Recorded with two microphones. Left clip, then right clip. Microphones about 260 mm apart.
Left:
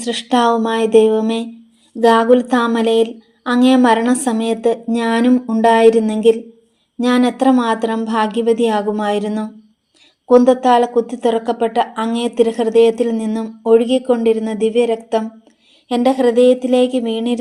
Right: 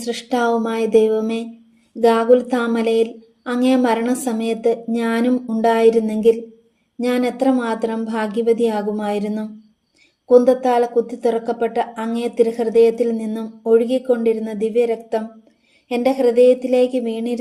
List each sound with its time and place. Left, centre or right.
0.0 s a woman's voice: centre